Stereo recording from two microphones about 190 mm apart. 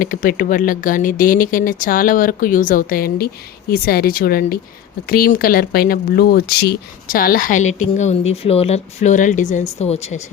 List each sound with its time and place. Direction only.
0.0 s speech: 45° left (ahead or behind)